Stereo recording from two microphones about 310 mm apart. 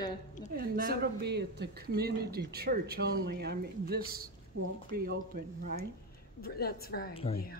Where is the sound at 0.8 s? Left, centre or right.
Right.